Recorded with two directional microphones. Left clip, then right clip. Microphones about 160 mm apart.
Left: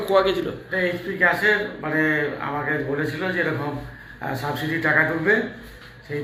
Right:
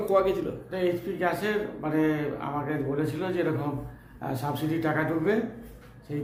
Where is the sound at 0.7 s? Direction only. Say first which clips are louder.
Left 5 dB; 20° right (ahead or behind).